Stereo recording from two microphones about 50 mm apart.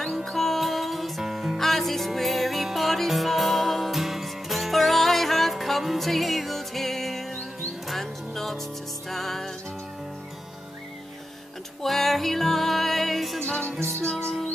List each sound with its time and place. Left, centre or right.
0.0 s music: centre
11.8 s music: centre
13.4 s music: centre